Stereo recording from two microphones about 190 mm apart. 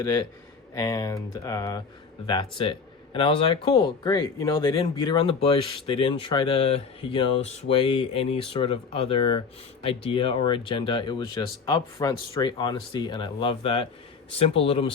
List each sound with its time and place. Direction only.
0.0 s speech: 15° left (ahead or behind)